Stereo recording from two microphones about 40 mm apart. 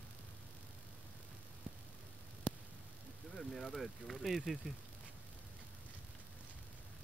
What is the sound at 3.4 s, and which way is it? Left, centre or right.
A man's voice, centre.